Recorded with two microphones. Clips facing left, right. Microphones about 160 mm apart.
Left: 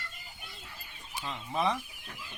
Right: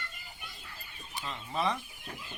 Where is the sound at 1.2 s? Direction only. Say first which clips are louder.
Left 2 dB; 20° left (ahead or behind).